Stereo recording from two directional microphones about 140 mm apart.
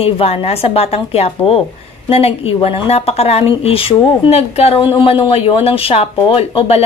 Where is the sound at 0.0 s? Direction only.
45° left (ahead or behind).